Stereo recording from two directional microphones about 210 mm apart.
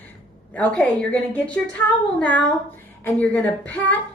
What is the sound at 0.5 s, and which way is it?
A woman's voice, 5° left (ahead or behind).